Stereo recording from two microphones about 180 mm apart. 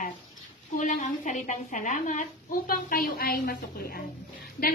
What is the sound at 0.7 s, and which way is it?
A woman's voice, 45° left (ahead or behind).